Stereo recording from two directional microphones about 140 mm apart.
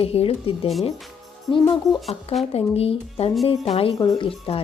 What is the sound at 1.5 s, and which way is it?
Speech, 30° left (ahead or behind).